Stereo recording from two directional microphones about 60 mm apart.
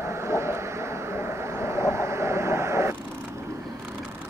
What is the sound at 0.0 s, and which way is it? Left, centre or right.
Vehicle, right.